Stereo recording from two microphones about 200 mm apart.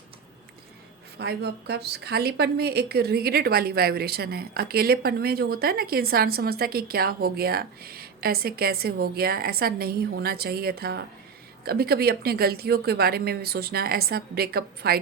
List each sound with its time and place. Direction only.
1.2 s a woman's voice: 55° right (ahead or behind)